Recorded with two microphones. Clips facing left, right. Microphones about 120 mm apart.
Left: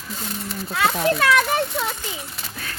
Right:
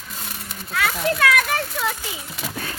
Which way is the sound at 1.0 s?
30° left (ahead or behind).